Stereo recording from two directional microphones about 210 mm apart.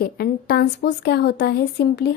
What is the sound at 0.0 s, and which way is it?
Speech, 50° left (ahead or behind).